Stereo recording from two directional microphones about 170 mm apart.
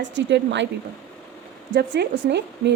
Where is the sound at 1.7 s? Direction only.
90° right.